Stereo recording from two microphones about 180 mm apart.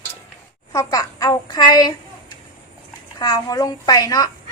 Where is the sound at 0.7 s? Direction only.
20° left (ahead or behind).